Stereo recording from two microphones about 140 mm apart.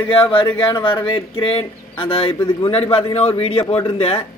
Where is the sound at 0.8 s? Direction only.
35° left (ahead or behind).